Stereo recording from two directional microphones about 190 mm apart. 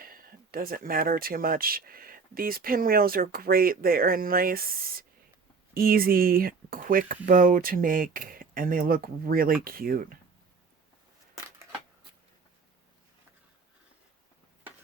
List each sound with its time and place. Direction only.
0.0 s speech: 50° right (ahead or behind)